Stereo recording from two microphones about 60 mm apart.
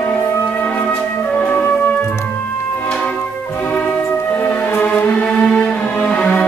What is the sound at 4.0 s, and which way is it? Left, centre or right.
Music, left.